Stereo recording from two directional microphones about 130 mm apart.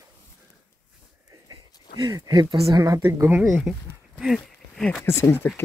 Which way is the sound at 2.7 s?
25° right (ahead or behind).